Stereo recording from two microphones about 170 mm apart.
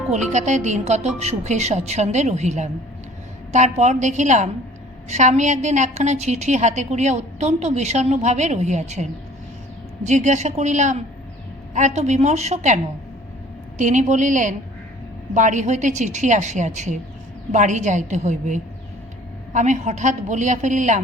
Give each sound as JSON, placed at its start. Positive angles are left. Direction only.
{"t": 0.3, "sound": "a woman's voice", "side_deg": -45}